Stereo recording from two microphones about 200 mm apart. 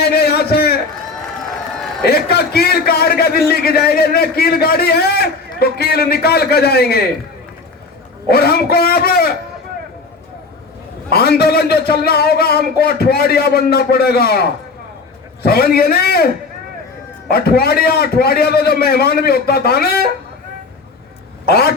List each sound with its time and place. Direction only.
0.0 s a sound: 50° left (ahead or behind)
2.0 s a man's voice: 50° left (ahead or behind)
8.3 s a man's voice: 50° left (ahead or behind)
11.1 s a man's voice: 50° left (ahead or behind)
15.4 s a man's voice: 50° left (ahead or behind)
21.5 s a man's voice: 50° left (ahead or behind)